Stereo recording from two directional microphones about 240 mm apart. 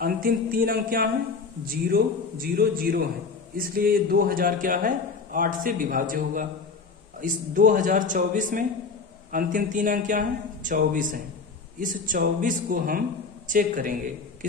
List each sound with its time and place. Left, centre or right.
0.0 s a man's voice: right